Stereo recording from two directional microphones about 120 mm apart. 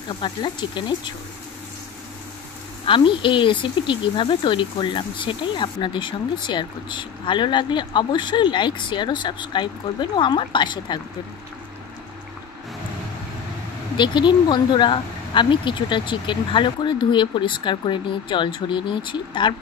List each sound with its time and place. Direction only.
0.2 s speech: 40° left (ahead or behind)
2.9 s speech: 45° left (ahead or behind)
13.9 s speech: 40° left (ahead or behind)